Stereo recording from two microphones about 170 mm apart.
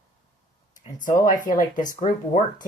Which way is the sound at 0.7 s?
50° left (ahead or behind).